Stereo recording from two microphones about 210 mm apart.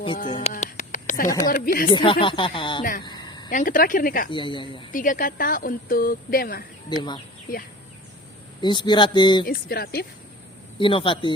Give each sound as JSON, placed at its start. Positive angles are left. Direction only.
{"t": 0.3, "sound": "speech", "side_deg": 25}
{"t": 0.5, "sound": "a sound", "side_deg": 35}
{"t": 1.5, "sound": "speech", "side_deg": 40}
{"t": 1.9, "sound": "speech", "side_deg": 25}
{"t": 3.0, "sound": "a sound", "side_deg": 20}
{"t": 3.5, "sound": "speech", "side_deg": 40}
{"t": 4.3, "sound": "speech", "side_deg": 25}
{"t": 4.9, "sound": "a woman's voice", "side_deg": 40}
{"t": 6.9, "sound": "speech", "side_deg": 20}
{"t": 8.6, "sound": "speech", "side_deg": 20}
{"t": 9.5, "sound": "a woman's voice", "side_deg": 45}
{"t": 10.8, "sound": "speech", "side_deg": 25}